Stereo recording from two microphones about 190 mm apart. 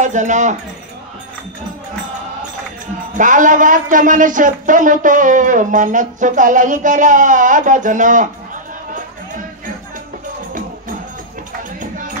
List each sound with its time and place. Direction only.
0.0 s speech: 40° right (ahead or behind)
3.2 s a woman's voice: 45° right (ahead or behind)